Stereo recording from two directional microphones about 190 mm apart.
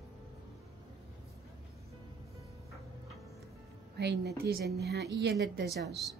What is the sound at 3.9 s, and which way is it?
Speech, 60° right (ahead or behind).